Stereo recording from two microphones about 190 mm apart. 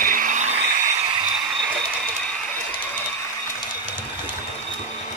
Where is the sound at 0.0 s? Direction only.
45° right (ahead or behind).